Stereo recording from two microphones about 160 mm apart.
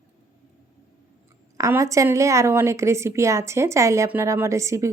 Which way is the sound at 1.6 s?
20° right (ahead or behind).